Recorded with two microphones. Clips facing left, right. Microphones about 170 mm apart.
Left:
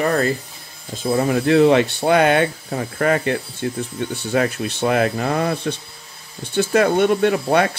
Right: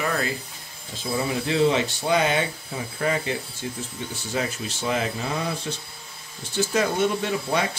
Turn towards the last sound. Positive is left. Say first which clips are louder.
# left 7 dB
turn(degrees=60)  # may be behind; listen again after turning